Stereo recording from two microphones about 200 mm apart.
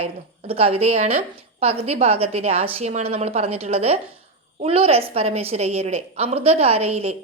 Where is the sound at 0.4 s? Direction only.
30° right (ahead or behind).